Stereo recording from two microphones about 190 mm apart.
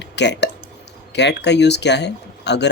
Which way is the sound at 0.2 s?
65° left (ahead or behind).